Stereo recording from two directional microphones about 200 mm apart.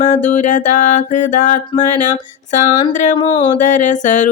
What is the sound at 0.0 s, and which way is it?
Music, 35° left (ahead or behind).